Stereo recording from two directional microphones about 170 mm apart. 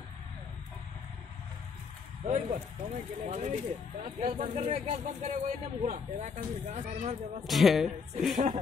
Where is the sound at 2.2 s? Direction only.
40° right (ahead or behind).